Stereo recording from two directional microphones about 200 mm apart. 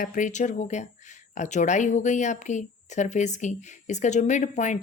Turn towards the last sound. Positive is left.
turn(degrees=35)  # may be behind; listen again after turning